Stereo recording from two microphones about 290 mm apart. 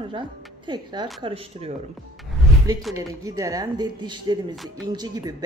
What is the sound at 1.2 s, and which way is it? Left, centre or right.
Speech, centre.